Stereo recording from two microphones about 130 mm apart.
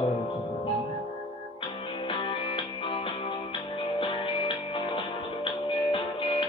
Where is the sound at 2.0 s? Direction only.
40° left (ahead or behind).